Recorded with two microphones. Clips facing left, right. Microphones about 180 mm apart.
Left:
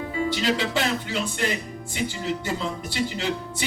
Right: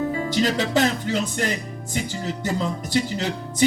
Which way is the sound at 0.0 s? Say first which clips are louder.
Right 3 dB; 45° right (ahead or behind).